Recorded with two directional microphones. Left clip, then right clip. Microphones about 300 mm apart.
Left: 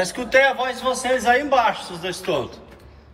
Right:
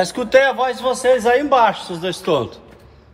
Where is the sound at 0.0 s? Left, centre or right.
Centre.